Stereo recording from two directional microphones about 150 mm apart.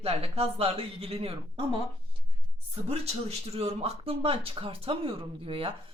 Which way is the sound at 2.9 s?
45° right (ahead or behind).